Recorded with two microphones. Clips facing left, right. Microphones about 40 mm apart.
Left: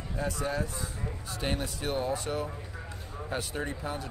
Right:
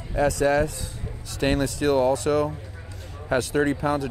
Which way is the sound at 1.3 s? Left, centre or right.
Right.